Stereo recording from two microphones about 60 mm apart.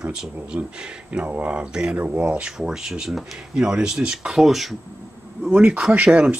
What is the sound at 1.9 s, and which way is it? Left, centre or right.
Speech, right.